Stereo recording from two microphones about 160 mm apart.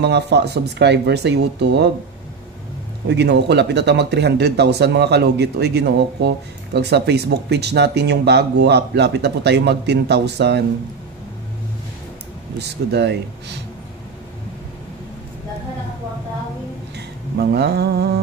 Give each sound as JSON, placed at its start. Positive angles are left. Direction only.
{"t": 0.0, "sound": "speech", "side_deg": -90}
{"t": 3.1, "sound": "speech", "side_deg": -90}
{"t": 12.5, "sound": "speech", "side_deg": -90}
{"t": 17.5, "sound": "speech", "side_deg": -90}